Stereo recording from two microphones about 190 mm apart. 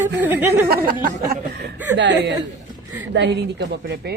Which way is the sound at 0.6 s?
50° right (ahead or behind).